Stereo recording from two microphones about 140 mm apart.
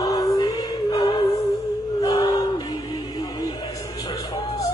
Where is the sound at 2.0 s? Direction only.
25° left (ahead or behind).